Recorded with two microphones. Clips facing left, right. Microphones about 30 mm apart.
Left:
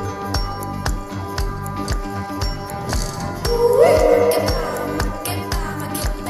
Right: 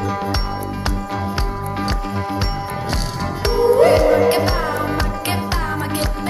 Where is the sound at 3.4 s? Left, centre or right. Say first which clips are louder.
Even; right.